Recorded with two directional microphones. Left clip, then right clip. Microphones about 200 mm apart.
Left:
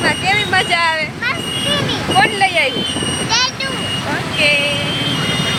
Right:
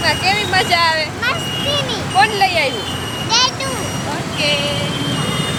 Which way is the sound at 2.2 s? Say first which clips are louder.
Right 1 dB; 30° left (ahead or behind).